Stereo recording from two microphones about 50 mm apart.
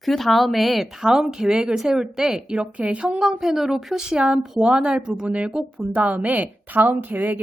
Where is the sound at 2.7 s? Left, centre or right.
Right.